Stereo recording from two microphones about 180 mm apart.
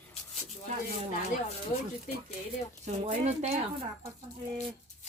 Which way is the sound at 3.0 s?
40° right (ahead or behind).